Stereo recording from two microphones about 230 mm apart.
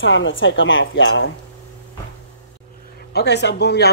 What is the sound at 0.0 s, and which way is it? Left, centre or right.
A woman's voice, left.